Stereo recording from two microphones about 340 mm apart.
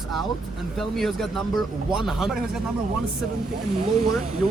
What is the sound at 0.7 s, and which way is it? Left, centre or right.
Speech, centre.